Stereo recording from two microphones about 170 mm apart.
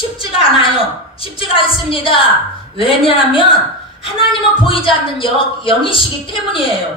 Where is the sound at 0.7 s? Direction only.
35° left (ahead or behind).